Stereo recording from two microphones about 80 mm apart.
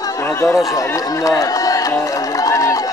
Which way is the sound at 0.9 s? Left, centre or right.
Left.